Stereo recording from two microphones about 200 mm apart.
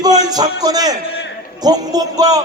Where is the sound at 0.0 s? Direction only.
20° right (ahead or behind).